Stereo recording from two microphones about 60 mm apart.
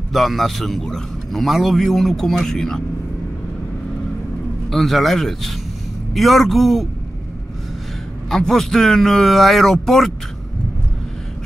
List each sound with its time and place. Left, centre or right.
0.1 s a man's voice: centre
4.6 s a man's voice: centre
8.3 s a man's voice: centre